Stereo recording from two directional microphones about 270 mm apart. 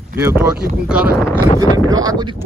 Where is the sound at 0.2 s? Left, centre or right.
Centre.